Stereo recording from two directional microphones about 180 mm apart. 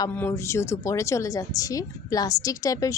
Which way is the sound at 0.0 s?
10° left (ahead or behind).